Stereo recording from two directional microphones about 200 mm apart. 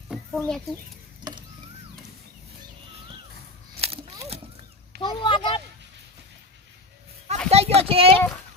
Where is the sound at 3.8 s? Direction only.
30° right (ahead or behind).